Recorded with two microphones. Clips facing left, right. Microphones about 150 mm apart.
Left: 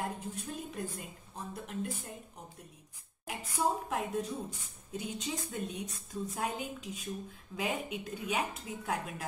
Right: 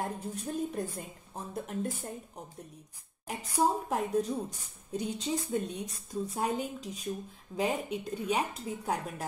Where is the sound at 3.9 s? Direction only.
40° right (ahead or behind).